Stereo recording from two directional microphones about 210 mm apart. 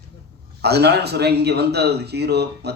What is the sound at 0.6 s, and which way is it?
A man's voice, 50° right (ahead or behind).